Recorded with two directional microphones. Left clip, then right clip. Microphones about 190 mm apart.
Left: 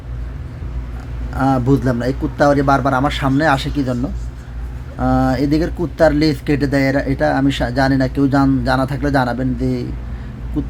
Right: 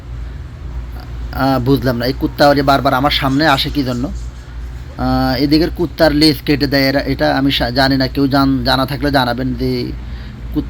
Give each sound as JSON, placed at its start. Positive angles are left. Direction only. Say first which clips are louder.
{"t": 1.3, "sound": "speech", "louder": "right 2 dB", "side_deg": -5}